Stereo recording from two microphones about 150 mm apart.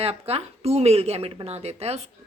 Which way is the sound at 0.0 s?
40° right (ahead or behind).